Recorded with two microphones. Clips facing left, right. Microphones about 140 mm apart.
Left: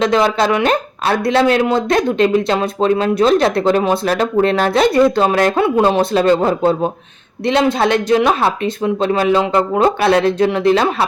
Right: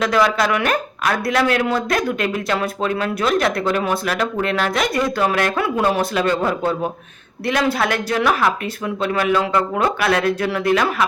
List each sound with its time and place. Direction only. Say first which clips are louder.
0.0 s speech: left 3 dB; 25° left (ahead or behind)